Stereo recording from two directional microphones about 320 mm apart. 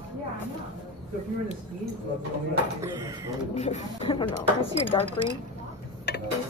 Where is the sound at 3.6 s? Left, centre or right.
Centre.